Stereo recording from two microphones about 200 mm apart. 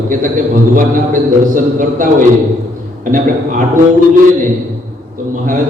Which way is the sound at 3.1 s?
40° right (ahead or behind).